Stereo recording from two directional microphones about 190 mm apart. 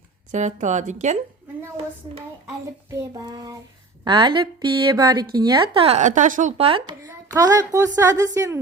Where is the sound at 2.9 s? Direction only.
20° right (ahead or behind); by 6.7 s 40° right (ahead or behind).